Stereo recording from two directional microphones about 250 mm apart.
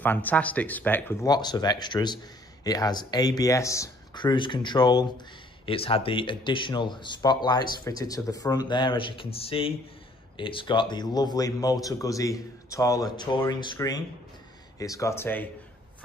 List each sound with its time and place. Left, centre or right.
0.0 s a man's voice: centre